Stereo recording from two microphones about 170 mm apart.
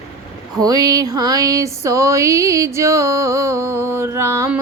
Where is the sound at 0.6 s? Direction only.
20° right (ahead or behind).